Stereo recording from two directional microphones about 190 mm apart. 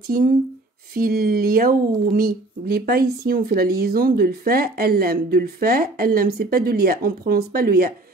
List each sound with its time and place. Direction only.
0.1 s speech: 50° right (ahead or behind)